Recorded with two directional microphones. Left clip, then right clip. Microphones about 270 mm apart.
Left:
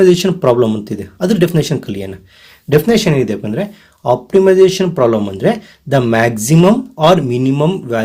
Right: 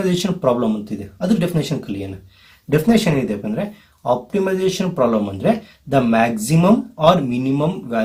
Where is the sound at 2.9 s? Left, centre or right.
Left.